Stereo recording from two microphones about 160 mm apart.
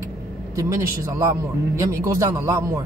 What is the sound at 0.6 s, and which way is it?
Speech, 20° right (ahead or behind).